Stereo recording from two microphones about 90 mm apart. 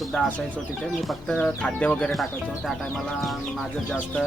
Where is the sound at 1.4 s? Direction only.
15° left (ahead or behind).